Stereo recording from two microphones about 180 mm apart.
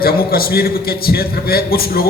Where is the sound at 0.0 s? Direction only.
55° left (ahead or behind).